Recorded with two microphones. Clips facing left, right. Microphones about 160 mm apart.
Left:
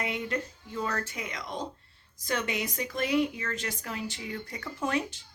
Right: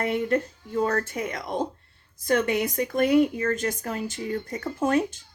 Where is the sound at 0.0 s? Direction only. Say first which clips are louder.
Right 8 dB; 50° right (ahead or behind).